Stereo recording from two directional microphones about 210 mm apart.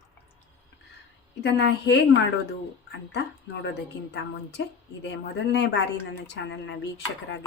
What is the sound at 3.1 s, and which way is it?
Speech, 55° left (ahead or behind).